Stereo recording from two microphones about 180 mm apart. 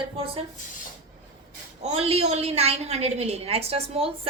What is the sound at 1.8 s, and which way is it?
A woman's voice, 35° right (ahead or behind).